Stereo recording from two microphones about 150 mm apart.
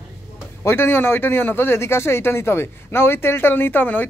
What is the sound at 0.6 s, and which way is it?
A man's voice, 15° left (ahead or behind).